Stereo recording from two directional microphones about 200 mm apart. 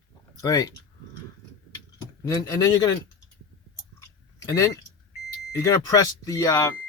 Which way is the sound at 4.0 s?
15° left (ahead or behind).